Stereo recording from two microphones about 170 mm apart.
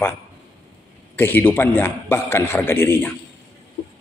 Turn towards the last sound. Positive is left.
turn(degrees=10)  # may be behind; listen again after turning